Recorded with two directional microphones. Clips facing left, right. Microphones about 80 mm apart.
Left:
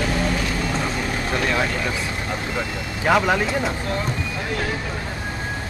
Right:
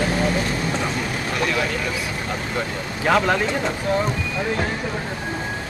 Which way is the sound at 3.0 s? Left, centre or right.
Centre.